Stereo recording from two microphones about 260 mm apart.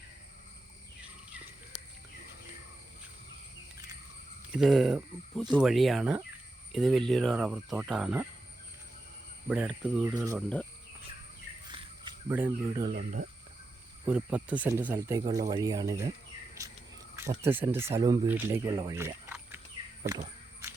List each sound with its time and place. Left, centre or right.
4.5 s speech: centre
9.5 s speech: centre
12.3 s speech: centre
12.9 s speech: right
14.0 s speech: centre
17.2 s speech: centre
20.1 s a sound: centre